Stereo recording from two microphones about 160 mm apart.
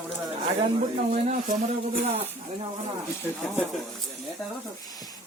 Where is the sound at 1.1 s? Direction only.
45° right (ahead or behind).